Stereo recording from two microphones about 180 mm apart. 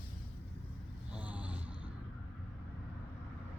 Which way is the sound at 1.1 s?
10° right (ahead or behind).